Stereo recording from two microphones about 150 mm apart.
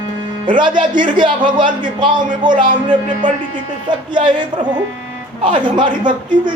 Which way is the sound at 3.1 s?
55° right (ahead or behind).